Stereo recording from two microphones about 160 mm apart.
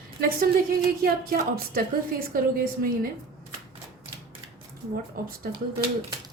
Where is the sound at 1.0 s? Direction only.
65° right (ahead or behind).